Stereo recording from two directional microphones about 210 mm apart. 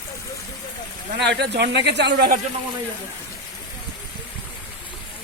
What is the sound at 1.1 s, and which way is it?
Speech, 55° right (ahead or behind).